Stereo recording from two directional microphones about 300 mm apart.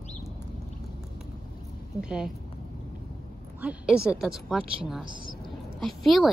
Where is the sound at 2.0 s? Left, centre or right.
Centre.